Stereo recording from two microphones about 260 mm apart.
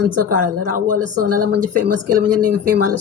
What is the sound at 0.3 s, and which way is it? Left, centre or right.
Speech, right.